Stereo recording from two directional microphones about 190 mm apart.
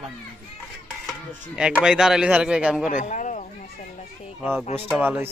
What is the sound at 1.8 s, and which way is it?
Speech, 5° right (ahead or behind).